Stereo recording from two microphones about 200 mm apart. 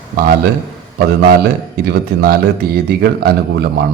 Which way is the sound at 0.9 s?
50° right (ahead or behind).